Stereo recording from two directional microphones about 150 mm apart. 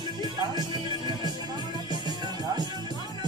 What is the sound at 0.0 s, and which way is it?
Music, 30° right (ahead or behind).